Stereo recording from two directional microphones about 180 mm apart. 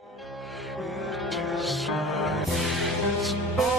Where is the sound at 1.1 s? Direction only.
Centre (ahead or behind).